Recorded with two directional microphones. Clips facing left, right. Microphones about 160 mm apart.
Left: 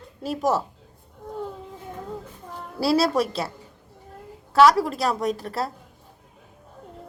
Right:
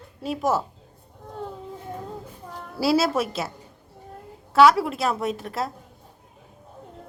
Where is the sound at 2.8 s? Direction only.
Centre (ahead or behind).